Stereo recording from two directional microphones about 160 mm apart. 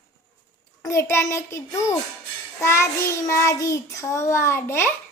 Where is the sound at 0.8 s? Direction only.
20° left (ahead or behind).